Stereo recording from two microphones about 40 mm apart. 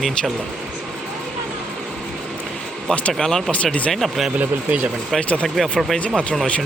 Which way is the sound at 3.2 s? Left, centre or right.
Centre.